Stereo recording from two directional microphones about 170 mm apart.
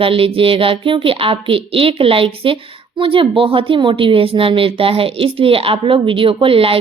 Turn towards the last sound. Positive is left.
turn(degrees=-35)  # may be behind; listen again after turning